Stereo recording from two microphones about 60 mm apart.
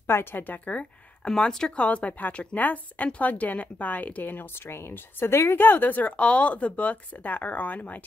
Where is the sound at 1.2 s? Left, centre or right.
Centre; by 8.0 s left.